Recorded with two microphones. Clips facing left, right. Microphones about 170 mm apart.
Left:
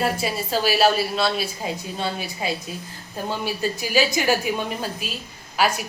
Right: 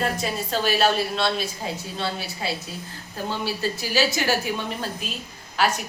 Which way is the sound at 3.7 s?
15° left (ahead or behind).